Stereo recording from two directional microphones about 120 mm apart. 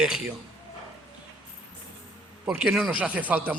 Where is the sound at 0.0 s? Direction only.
5° right (ahead or behind).